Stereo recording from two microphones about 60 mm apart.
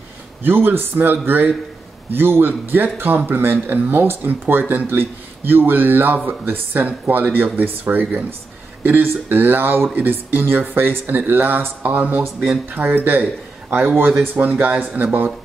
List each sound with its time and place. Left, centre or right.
0.4 s speech: right
14.3 s speech: right